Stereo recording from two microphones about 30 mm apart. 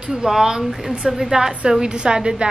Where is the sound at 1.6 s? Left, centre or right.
Right.